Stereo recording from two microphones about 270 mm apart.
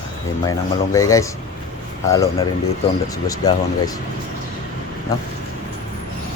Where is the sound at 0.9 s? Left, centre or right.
Centre.